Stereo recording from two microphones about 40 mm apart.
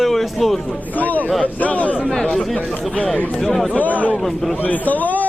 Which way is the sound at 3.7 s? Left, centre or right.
Left.